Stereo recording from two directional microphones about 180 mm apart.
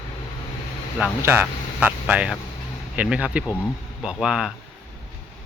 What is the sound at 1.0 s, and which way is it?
Speech, 10° right (ahead or behind).